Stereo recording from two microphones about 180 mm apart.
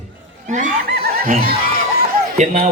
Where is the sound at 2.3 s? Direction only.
40° right (ahead or behind).